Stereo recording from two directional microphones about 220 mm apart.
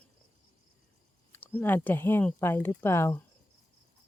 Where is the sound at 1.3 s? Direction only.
10° left (ahead or behind).